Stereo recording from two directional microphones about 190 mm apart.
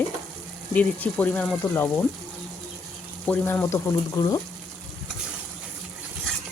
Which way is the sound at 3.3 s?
10° left (ahead or behind).